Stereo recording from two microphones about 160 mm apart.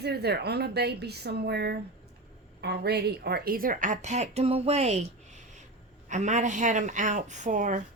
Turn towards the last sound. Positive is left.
turn(degrees=-55)  # may be behind; listen again after turning